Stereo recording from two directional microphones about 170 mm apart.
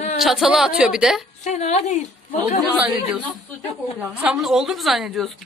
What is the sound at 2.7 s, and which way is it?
A woman's voice, 5° right (ahead or behind).